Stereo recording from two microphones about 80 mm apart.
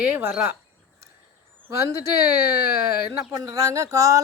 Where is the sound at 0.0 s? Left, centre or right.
Right.